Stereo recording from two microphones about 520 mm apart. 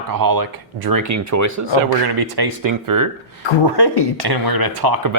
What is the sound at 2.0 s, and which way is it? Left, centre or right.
Speech, right.